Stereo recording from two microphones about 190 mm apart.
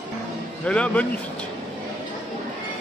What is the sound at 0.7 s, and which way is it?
Speech, 5° left (ahead or behind).